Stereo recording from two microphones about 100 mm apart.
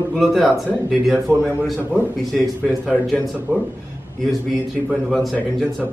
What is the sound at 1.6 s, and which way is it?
Speech, centre (ahead or behind).